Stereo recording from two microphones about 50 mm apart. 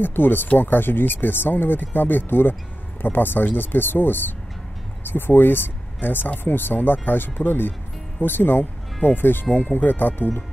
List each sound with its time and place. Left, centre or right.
0.0 s speech: left